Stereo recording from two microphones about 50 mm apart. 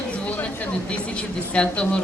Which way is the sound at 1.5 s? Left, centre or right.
Left.